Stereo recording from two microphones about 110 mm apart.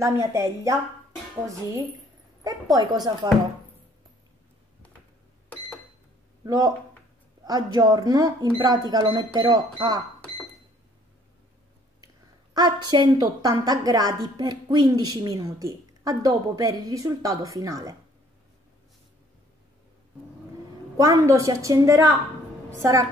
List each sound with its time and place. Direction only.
0.0 s a woman's voice: 30° right (ahead or behind)
2.4 s a woman's voice: 35° right (ahead or behind)
6.4 s a woman's voice: 35° right (ahead or behind)
12.5 s a woman's voice: 40° right (ahead or behind)
21.0 s a woman's voice: 30° right (ahead or behind)